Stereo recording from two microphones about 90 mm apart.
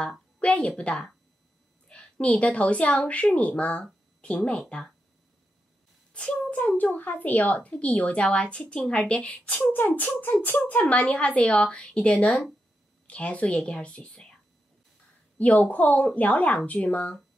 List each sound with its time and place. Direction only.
0.0 s a woman's voice: 15° left (ahead or behind)
6.1 s a child's voice: 10° left (ahead or behind)
15.3 s a woman's voice: 15° left (ahead or behind)